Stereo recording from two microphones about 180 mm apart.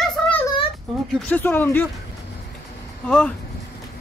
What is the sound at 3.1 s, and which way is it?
Speech, 5° left (ahead or behind).